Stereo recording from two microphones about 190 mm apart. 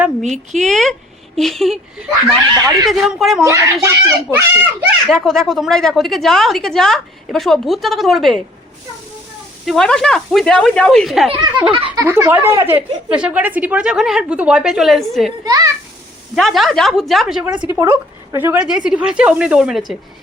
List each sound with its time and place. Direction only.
0.0 s speech: centre (ahead or behind)
2.9 s speech: centre (ahead or behind)
3.4 s a child's voice: 15° right (ahead or behind)
5.0 s speech: centre (ahead or behind)
9.6 s speech: 5° left (ahead or behind)
11.3 s a child's voice: 20° right (ahead or behind)
11.9 s speech: 10° right (ahead or behind)
15.4 s a child's voice: 20° right (ahead or behind)
16.3 s speech: centre (ahead or behind)